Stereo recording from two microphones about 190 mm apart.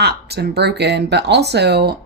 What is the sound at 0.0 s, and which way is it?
Speech, 60° right (ahead or behind).